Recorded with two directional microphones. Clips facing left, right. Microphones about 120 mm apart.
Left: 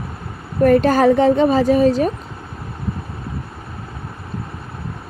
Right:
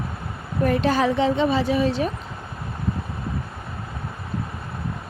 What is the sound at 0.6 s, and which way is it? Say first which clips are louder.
A woman's voice: left 8 dB; 50° left (ahead or behind).